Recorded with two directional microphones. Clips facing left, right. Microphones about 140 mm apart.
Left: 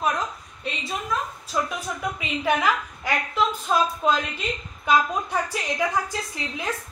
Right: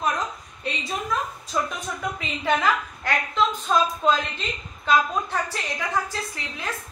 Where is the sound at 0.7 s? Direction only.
Centre (ahead or behind).